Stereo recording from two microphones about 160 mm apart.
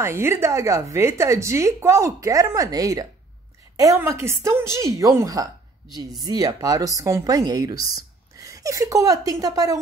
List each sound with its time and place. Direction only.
0.0 s a woman's voice: 15° right (ahead or behind)